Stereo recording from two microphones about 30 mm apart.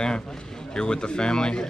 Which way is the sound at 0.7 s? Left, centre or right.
Left.